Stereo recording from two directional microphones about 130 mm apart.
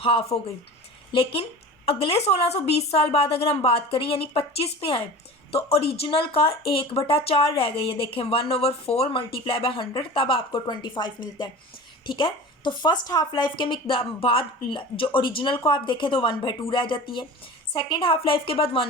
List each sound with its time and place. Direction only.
0.0 s a woman's voice: 45° left (ahead or behind)